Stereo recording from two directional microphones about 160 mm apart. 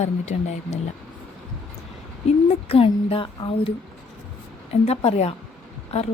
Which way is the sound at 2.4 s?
40° left (ahead or behind).